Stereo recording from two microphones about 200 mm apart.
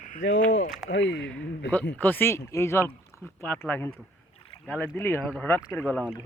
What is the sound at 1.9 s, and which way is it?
Speech, 10° left (ahead or behind).